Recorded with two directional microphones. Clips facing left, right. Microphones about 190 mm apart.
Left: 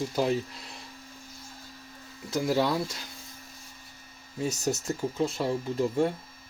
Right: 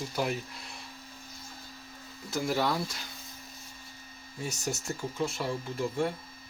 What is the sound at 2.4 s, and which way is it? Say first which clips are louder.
Speech: left 3 dB; 20° left (ahead or behind).